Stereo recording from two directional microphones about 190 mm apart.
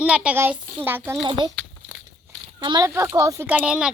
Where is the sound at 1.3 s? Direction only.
25° right (ahead or behind).